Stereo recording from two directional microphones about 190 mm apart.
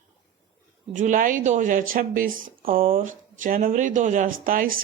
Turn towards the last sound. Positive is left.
turn(degrees=-45)  # may be behind; listen again after turning